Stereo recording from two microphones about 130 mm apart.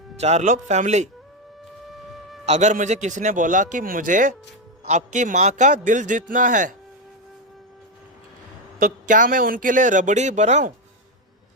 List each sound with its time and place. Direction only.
0.2 s speech: 60° right (ahead or behind)
1.9 s music: centre (ahead or behind)
2.5 s a man's voice: 65° right (ahead or behind); by 4.4 s 90° right
4.9 s a man's voice: 65° right (ahead or behind)
8.8 s a man's voice: 90° right; by 10.7 s 60° right (ahead or behind)